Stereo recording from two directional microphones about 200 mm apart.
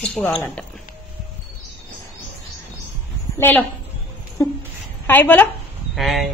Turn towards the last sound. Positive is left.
turn(degrees=0)  # may be behind; listen again after turning